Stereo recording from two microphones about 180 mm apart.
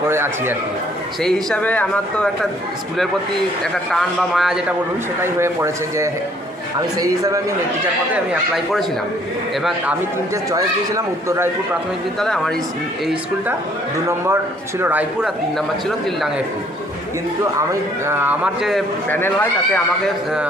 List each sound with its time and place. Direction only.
0.1 s a sound: 15° right (ahead or behind)
1.2 s a man's voice: 5° left (ahead or behind)
3.6 s a man's voice: centre (ahead or behind)
5.2 s speech: 15° right (ahead or behind)
8.1 s a man's voice: centre (ahead or behind)
10.5 s speech: 15° right (ahead or behind)
14.8 s speech: 10° right (ahead or behind)
18.1 s speech: 10° right (ahead or behind)
19.1 s speech: 10° left (ahead or behind)